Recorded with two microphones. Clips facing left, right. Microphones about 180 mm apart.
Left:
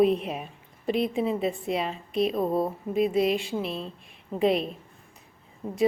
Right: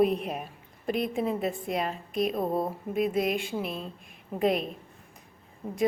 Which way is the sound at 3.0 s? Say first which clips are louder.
Left 3 dB; 50° right (ahead or behind).